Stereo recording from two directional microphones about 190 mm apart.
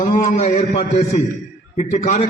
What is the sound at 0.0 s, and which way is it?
A man's voice, 40° left (ahead or behind).